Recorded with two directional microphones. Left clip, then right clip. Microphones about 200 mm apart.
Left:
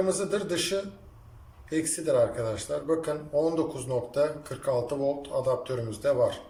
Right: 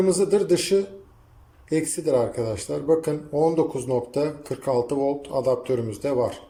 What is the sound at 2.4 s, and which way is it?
Speech, 25° right (ahead or behind).